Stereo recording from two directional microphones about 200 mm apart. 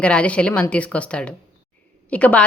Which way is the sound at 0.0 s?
5° left (ahead or behind).